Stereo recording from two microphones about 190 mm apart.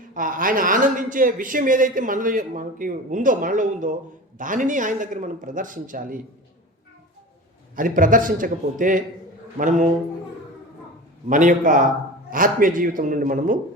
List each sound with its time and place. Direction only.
0.1 s a man's voice: 45° right (ahead or behind)
7.8 s a man's voice: 45° right (ahead or behind)
11.3 s a man's voice: 45° right (ahead or behind)